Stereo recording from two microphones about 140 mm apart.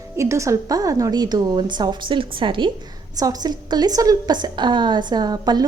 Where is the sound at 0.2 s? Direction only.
20° right (ahead or behind).